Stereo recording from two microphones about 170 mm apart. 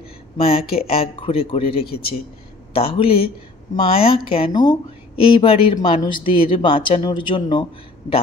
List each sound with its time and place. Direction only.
0.4 s speech: 35° left (ahead or behind)